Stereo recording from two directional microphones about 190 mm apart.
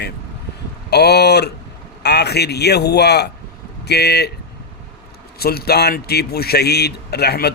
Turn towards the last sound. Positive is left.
turn(degrees=55)  # may be behind; listen again after turning